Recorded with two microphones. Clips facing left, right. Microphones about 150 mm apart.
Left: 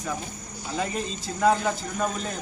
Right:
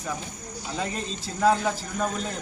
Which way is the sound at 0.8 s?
Centre (ahead or behind).